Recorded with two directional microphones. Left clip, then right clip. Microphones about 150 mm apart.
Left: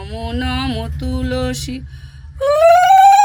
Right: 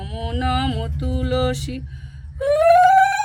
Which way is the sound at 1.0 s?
20° left (ahead or behind).